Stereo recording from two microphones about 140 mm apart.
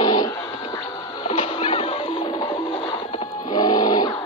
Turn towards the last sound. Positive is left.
turn(degrees=30)  # may be behind; listen again after turning